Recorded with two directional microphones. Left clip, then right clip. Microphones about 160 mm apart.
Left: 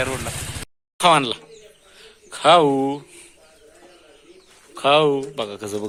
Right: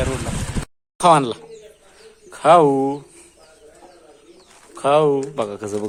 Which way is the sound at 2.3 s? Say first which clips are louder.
Right 2 dB; centre (ahead or behind).